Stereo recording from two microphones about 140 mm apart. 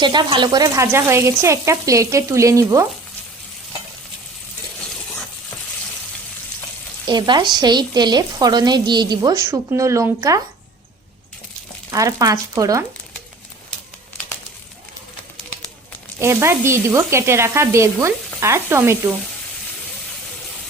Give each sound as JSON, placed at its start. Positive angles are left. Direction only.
{"t": 0.0, "sound": "sizzle", "side_deg": -35}
{"t": 7.1, "sound": "speech", "side_deg": -30}
{"t": 11.9, "sound": "sizzle", "side_deg": -25}
{"t": 16.2, "sound": "sizzle", "side_deg": -20}